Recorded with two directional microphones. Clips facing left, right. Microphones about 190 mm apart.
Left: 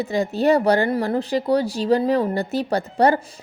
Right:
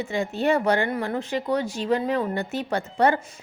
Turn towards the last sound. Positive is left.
turn(degrees=35)  # may be behind; listen again after turning